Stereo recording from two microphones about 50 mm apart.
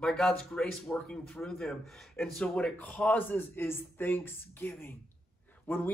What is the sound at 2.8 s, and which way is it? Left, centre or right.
Speech, left.